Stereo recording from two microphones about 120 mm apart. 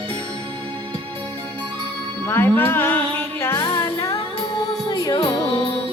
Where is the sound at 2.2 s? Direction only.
20° left (ahead or behind).